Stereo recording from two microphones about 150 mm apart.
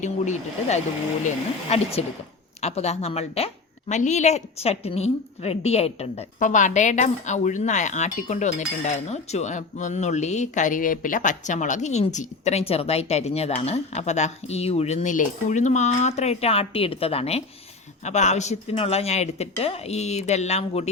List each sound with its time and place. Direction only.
0.0 s a woman's voice: 50° left (ahead or behind)